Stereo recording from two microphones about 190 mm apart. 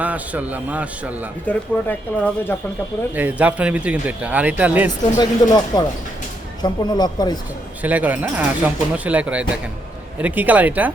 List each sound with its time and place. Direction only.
0.0 s speech: 10° right (ahead or behind)
1.5 s speech: 10° left (ahead or behind)
3.2 s speech: 10° right (ahead or behind)
4.9 s speech: 20° left (ahead or behind)
7.8 s speech: 10° right (ahead or behind)